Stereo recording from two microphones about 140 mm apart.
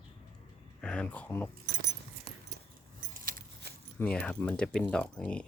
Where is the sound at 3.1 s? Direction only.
80° right.